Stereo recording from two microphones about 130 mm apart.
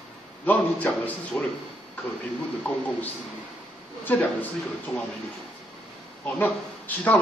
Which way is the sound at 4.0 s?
15° left (ahead or behind).